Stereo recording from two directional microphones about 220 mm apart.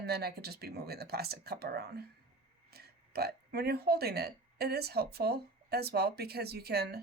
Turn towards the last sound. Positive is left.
turn(degrees=-45)  # may be behind; listen again after turning